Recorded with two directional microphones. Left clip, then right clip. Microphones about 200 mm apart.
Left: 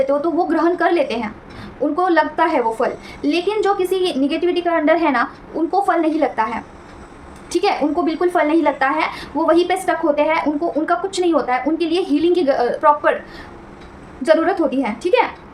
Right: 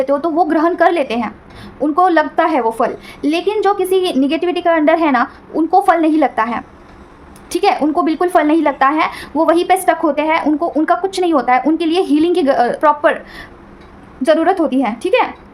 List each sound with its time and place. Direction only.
0.0 s a woman's voice: 40° right (ahead or behind)